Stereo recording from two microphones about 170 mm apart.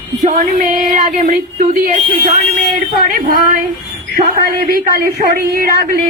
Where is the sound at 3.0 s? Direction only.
60° right (ahead or behind).